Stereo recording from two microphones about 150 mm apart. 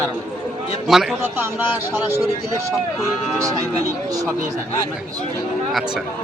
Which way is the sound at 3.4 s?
20° right (ahead or behind).